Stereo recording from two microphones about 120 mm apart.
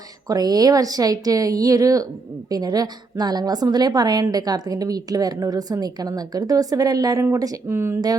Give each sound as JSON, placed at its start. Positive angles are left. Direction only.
{"t": 0.3, "sound": "a woman's voice", "side_deg": -35}